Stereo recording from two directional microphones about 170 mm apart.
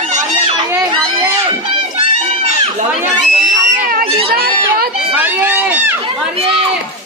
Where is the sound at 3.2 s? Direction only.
45° right (ahead or behind).